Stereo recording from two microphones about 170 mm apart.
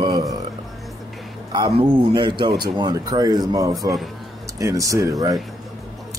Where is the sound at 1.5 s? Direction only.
25° right (ahead or behind).